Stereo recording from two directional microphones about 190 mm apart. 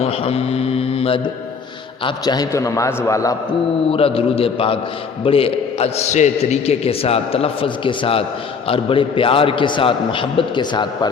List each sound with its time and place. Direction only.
0.0 s mantra: 30° left (ahead or behind)
2.0 s a man's voice: 20° left (ahead or behind)
3.8 s a man's voice: 30° left (ahead or behind)